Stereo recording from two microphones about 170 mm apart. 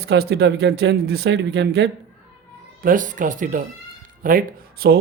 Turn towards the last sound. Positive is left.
turn(degrees=-60)  # may be behind; listen again after turning